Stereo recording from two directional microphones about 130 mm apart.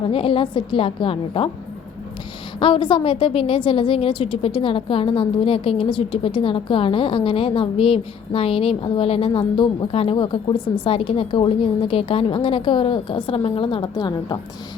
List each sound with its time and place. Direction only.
0.1 s a woman's voice: 45° left (ahead or behind)
2.6 s a woman's voice: 40° left (ahead or behind)